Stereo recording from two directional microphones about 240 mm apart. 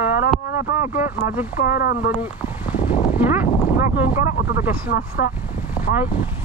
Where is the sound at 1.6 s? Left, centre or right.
Left.